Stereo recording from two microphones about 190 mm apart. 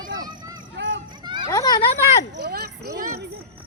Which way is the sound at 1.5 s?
20° left (ahead or behind).